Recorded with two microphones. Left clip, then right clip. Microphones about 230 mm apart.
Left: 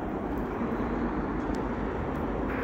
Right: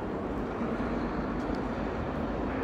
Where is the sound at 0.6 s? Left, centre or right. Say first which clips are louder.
Left 1 dB; right.